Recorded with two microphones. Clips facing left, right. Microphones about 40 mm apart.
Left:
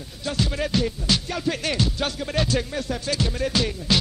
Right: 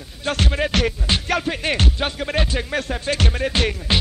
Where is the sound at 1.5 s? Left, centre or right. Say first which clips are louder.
Right 2 dB; right.